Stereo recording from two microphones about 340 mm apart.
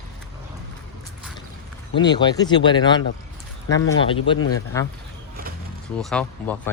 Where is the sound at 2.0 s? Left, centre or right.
Centre.